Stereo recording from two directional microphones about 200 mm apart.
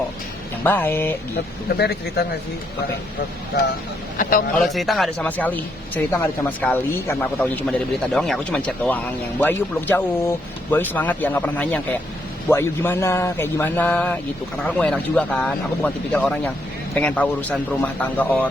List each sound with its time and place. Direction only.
0.6 s a man's voice: 10° left (ahead or behind)
1.6 s speech: 55° left (ahead or behind)
4.2 s speech: 45° left (ahead or behind)
4.5 s a man's voice: centre (ahead or behind)